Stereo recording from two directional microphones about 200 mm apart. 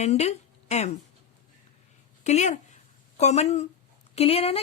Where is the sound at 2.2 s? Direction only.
35° left (ahead or behind).